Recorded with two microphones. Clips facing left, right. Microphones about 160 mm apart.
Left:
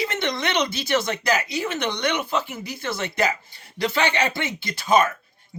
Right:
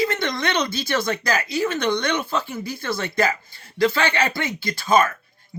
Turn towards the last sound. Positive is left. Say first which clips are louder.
# right 1 dB
turn(degrees=20)  # may be behind; listen again after turning